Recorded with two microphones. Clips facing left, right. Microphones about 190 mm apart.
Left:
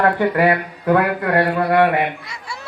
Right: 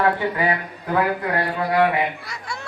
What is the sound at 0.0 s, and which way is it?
A man's voice, 65° left (ahead or behind).